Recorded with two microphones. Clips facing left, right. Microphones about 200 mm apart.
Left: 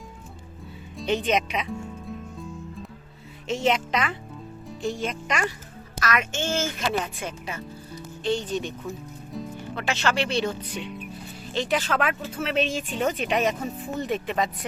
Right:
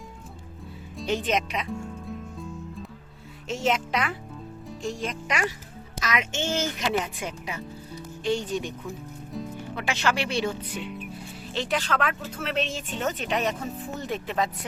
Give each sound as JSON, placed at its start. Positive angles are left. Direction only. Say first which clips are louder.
{"t": 0.9, "sound": "music", "louder": "left 2 dB", "side_deg": 0}
{"t": 3.5, "sound": "speech", "louder": "left 2 dB", "side_deg": 0}
{"t": 6.0, "sound": "a woman's voice", "louder": "left 2 dB", "side_deg": -20}
{"t": 9.3, "sound": "music", "louder": "even", "side_deg": 0}
{"t": 9.7, "sound": "speech", "louder": "left 1 dB", "side_deg": -10}